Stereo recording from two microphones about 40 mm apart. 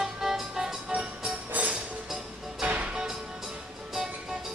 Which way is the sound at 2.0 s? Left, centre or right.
Centre.